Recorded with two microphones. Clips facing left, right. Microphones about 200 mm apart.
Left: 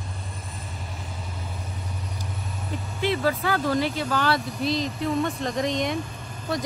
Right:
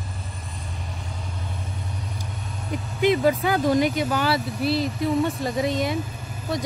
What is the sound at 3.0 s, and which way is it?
Speech, 15° right (ahead or behind).